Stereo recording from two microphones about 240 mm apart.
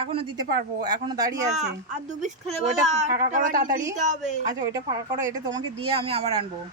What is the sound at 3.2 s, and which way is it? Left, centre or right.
Speech, right.